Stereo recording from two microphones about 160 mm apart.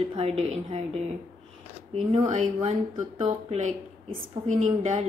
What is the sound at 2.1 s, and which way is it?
A woman's voice, 40° right (ahead or behind).